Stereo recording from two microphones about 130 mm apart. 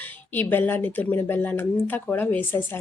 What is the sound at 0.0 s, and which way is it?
A woman's voice, 15° left (ahead or behind).